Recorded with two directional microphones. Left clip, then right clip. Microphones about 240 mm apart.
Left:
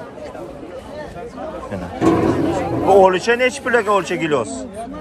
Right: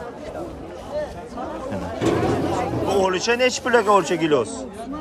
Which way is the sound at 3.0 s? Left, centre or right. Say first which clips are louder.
Left 5 dB; centre.